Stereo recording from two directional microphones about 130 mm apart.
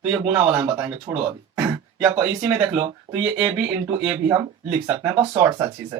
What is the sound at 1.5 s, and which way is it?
Speech, 10° right (ahead or behind).